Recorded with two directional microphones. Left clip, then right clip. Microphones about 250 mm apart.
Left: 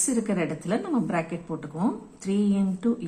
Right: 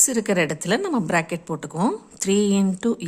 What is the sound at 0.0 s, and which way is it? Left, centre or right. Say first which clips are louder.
A woman's voice: right 6 dB; right.